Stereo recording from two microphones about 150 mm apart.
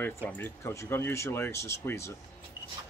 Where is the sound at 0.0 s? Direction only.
10° left (ahead or behind).